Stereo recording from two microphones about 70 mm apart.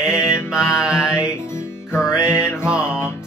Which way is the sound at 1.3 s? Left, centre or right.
Left.